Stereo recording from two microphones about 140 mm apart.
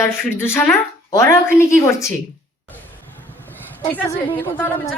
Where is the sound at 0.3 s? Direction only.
15° left (ahead or behind).